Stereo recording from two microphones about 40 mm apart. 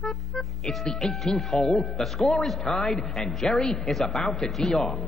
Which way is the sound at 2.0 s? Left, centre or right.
Centre.